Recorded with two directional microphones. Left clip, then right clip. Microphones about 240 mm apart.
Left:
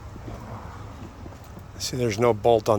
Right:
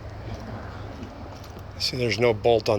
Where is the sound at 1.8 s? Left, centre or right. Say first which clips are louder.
Even; left.